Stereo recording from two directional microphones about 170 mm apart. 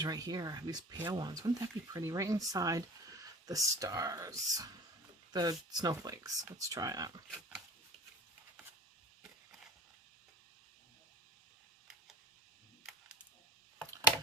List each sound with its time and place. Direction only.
0.0 s speech: 25° right (ahead or behind)